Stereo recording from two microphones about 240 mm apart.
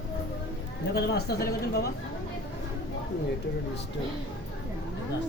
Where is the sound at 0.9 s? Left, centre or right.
Left.